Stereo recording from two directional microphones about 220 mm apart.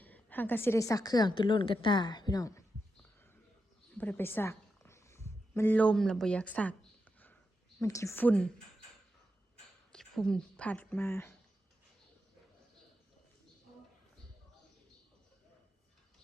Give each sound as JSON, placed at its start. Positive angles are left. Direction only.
{"t": 0.0, "sound": "a woman's voice", "side_deg": 10}
{"t": 3.9, "sound": "a sound", "side_deg": 5}
{"t": 7.8, "sound": "a woman's voice", "side_deg": 15}
{"t": 9.9, "sound": "speech", "side_deg": 0}